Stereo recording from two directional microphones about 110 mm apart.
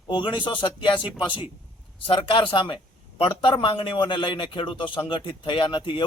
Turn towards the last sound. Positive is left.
turn(degrees=50)  # may be behind; listen again after turning